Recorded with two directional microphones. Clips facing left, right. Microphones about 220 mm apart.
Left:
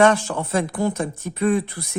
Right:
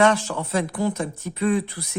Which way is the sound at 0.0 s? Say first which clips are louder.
Left 2 dB; 50° left (ahead or behind).